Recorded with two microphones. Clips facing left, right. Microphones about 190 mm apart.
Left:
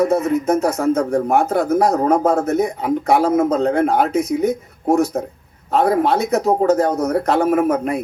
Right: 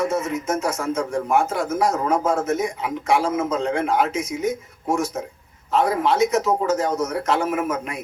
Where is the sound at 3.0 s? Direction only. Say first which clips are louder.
Left 5 dB; 60° left (ahead or behind).